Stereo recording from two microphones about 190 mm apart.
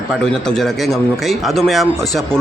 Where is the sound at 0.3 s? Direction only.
Centre (ahead or behind).